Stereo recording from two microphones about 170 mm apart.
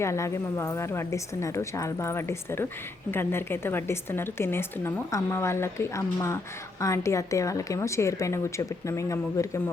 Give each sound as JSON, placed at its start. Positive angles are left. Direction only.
{"t": 0.0, "sound": "a woman's voice", "side_deg": 15}